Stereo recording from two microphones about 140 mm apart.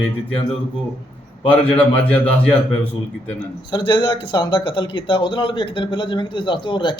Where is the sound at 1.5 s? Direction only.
10° left (ahead or behind).